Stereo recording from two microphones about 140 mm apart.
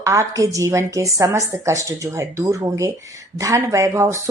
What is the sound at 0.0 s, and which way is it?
A woman's voice, 20° right (ahead or behind).